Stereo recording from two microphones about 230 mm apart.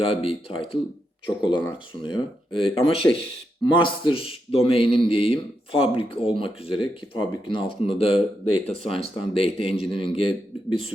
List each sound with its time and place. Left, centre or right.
0.0 s a man's voice: left